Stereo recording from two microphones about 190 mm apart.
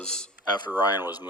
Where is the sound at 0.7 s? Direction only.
10° right (ahead or behind).